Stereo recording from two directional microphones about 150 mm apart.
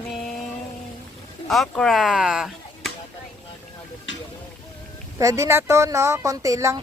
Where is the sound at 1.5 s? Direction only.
Centre (ahead or behind).